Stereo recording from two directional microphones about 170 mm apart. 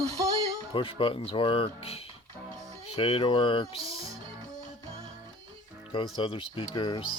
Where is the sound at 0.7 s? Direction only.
30° left (ahead or behind).